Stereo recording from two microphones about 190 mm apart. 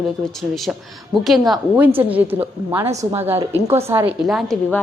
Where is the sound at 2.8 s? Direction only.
35° right (ahead or behind).